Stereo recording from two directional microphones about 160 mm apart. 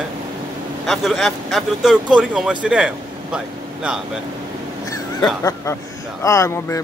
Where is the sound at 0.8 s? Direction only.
Centre (ahead or behind).